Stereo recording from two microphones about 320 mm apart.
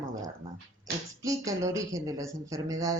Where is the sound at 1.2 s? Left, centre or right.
Centre.